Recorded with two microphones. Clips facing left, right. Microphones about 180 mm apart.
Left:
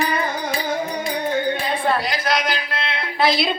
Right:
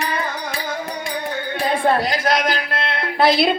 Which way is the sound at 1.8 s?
50° right (ahead or behind).